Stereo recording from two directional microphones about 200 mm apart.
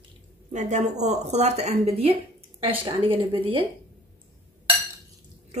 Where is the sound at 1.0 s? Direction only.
35° right (ahead or behind).